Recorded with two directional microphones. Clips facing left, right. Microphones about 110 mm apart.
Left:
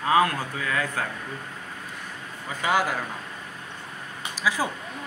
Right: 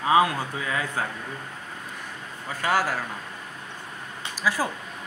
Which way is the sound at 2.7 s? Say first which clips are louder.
Even; 5° right (ahead or behind).